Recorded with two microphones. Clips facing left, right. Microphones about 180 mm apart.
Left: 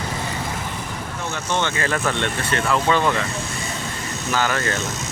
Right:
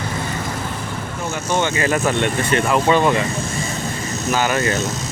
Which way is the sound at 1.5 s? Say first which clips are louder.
Right 4 dB; 10° right (ahead or behind).